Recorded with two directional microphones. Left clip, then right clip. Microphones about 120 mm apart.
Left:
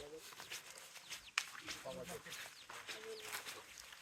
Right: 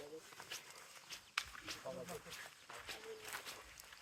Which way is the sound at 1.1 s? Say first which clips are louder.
Left 2 dB; 10° left (ahead or behind).